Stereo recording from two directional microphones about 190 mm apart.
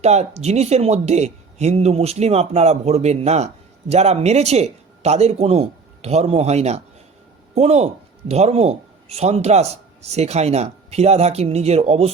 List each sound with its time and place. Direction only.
0.0 s speech: 35° right (ahead or behind)